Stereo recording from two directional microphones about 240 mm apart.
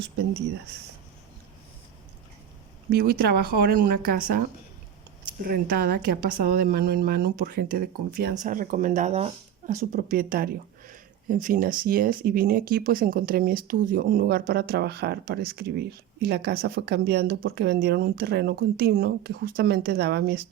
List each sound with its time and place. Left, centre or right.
2.9 s speech: right